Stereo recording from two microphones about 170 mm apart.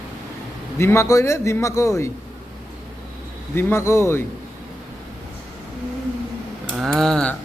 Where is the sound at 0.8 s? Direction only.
15° left (ahead or behind).